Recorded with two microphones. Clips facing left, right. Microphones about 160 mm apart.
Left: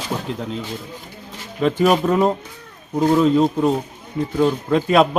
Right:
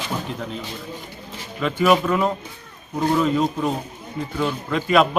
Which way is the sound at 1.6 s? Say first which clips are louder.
Left 2 dB; 35° left (ahead or behind).